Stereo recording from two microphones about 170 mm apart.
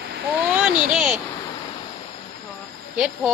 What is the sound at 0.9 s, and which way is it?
Speech, 5° right (ahead or behind).